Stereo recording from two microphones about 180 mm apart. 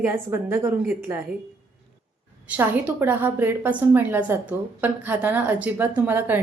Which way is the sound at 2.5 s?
10° right (ahead or behind).